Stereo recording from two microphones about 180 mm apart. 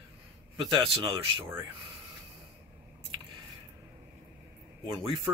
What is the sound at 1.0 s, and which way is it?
Speech, 25° right (ahead or behind).